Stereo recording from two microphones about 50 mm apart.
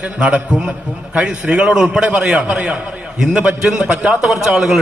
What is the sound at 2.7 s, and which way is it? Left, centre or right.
Speech, right.